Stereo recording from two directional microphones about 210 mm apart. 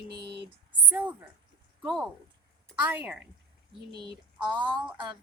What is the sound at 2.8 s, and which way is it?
Speech, 10° right (ahead or behind).